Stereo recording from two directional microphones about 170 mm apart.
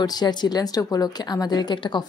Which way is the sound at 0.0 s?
25° left (ahead or behind).